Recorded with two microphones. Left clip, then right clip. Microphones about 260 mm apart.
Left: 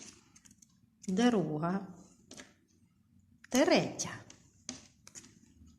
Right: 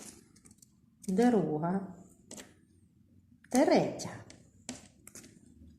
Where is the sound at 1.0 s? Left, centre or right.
Left.